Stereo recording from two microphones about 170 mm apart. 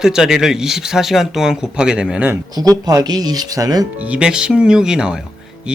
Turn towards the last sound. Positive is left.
turn(degrees=-5)  # may be behind; listen again after turning